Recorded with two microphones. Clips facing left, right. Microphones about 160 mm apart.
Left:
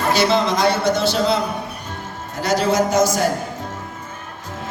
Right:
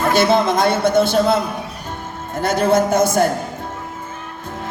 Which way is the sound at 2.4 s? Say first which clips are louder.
Right 2 dB; 55° right (ahead or behind).